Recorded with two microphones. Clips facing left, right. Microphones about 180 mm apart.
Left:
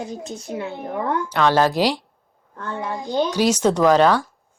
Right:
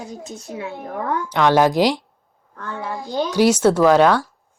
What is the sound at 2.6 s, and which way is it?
Speech, 25° left (ahead or behind).